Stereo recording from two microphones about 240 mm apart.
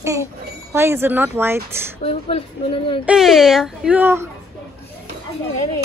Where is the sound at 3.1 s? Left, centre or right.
Centre.